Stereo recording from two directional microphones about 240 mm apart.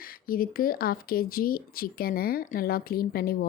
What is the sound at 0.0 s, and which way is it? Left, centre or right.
Speech, left.